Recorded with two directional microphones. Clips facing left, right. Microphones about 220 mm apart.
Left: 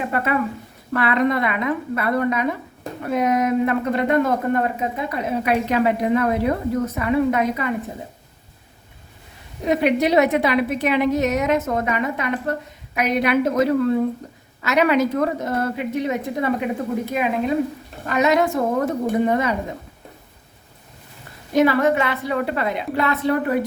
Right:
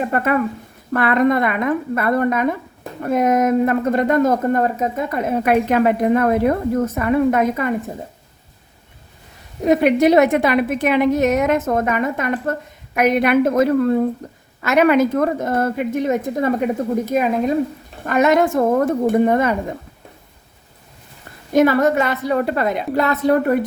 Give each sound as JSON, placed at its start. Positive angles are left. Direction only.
{"t": 0.1, "sound": "a woman's voice", "side_deg": -45}
{"t": 9.6, "sound": "a woman's voice", "side_deg": -50}
{"t": 21.5, "sound": "a woman's voice", "side_deg": -45}